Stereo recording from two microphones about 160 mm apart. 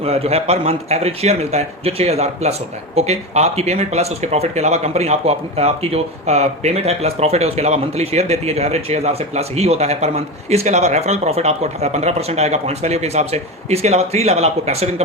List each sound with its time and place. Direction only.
0.0 s a man's voice: 40° right (ahead or behind)